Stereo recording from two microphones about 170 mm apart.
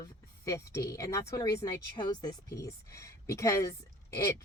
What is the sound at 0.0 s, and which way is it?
A woman's voice, 20° left (ahead or behind).